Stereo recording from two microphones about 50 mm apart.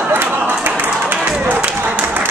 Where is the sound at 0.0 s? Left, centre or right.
Right.